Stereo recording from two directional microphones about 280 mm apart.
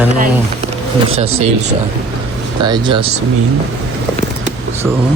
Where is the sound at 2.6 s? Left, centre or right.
Centre.